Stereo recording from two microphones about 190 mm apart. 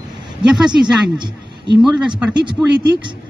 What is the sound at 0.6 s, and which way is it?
Speech, 25° right (ahead or behind).